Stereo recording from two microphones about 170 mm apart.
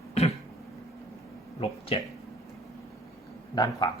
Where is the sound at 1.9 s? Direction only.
35° left (ahead or behind).